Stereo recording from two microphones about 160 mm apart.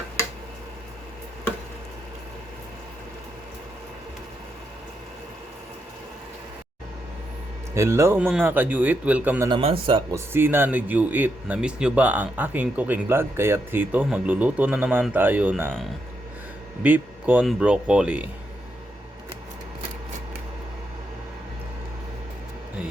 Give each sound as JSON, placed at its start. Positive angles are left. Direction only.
{"t": 7.7, "sound": "speech", "side_deg": -15}
{"t": 9.5, "sound": "speech", "side_deg": -35}
{"t": 10.1, "sound": "speech", "side_deg": -15}
{"t": 16.8, "sound": "speech", "side_deg": -10}